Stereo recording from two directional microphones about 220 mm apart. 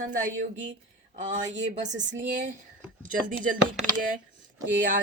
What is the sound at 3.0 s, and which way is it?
Speech, 40° right (ahead or behind).